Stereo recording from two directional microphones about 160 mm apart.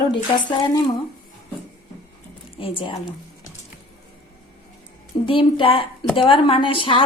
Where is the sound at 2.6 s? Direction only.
35° left (ahead or behind).